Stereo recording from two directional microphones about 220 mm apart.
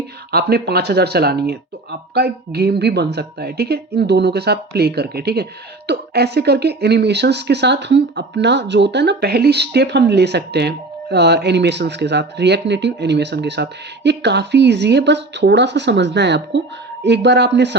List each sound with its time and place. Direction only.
0.3 s speech: 45° right (ahead or behind)